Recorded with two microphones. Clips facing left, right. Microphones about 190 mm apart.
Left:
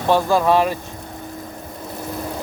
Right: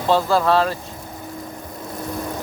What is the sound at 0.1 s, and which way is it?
Speech, 15° left (ahead or behind).